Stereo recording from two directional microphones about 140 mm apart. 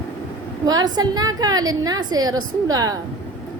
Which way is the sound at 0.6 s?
30° right (ahead or behind).